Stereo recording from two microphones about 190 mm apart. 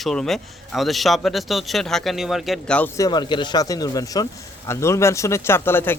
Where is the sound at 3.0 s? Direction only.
25° left (ahead or behind).